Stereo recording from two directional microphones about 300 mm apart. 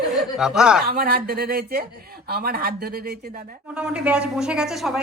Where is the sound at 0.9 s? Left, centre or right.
Right.